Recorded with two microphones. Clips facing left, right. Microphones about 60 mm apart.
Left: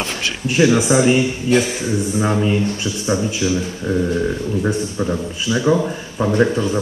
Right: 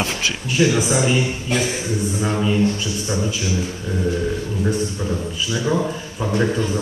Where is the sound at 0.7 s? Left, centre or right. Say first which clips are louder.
Left 4 dB; left.